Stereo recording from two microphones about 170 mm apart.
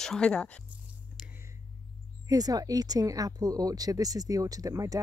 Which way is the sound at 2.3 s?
20° right (ahead or behind).